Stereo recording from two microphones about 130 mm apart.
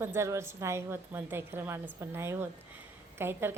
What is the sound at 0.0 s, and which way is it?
A woman's voice, 20° right (ahead or behind).